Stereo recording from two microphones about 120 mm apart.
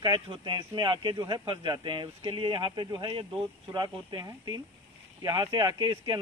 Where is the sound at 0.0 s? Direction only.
40° right (ahead or behind).